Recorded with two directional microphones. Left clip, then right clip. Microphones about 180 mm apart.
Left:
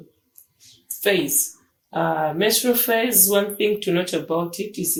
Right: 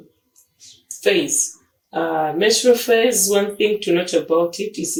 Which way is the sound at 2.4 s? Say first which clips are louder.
Right 5 dB; 40° left (ahead or behind).